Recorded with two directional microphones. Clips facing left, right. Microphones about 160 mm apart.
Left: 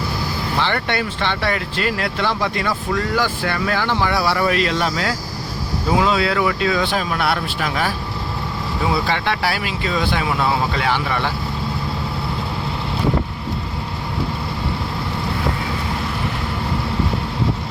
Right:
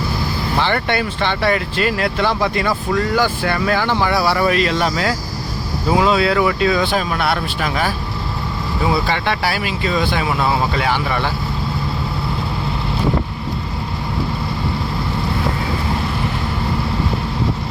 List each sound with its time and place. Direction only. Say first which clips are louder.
0.6 s speech: right 3 dB; 10° right (ahead or behind)
6.0 s speech: right 3 dB; 15° right (ahead or behind)
6.9 s speech: right 2 dB; centre (ahead or behind)
9.0 s speech: right 1 dB; centre (ahead or behind)